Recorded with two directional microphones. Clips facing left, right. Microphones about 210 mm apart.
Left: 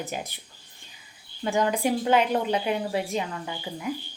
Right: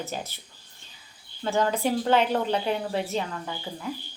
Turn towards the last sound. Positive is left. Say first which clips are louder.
# left 1 dB
turn(degrees=10)  # may be behind; listen again after turning